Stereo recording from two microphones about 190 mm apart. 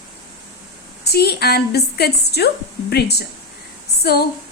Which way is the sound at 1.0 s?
55° left (ahead or behind).